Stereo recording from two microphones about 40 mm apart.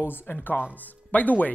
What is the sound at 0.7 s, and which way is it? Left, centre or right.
Speech, left.